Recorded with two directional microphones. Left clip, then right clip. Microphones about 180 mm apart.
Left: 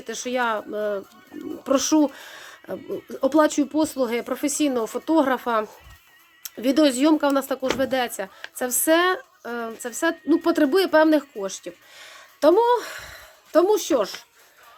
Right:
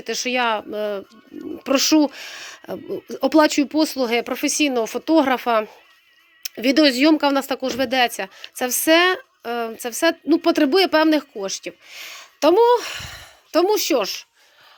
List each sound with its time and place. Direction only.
0.0 s speech: 15° right (ahead or behind)